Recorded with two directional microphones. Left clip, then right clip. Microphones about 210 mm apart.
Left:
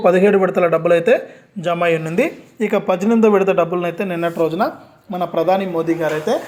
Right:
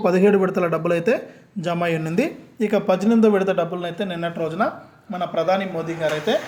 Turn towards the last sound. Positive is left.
turn(degrees=10)  # may be behind; listen again after turning